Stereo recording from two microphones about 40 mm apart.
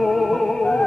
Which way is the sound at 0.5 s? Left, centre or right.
Centre.